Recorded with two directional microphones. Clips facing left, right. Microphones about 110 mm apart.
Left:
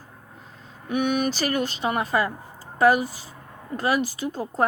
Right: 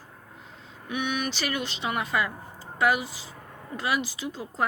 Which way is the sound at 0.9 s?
45° left (ahead or behind).